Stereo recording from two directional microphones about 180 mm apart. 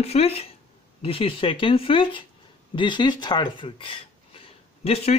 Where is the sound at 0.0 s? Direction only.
35° left (ahead or behind).